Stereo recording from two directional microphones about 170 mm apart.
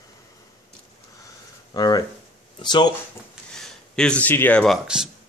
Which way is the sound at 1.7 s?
25° left (ahead or behind).